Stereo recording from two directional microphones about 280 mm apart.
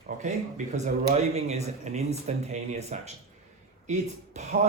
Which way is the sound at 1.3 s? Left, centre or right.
Right.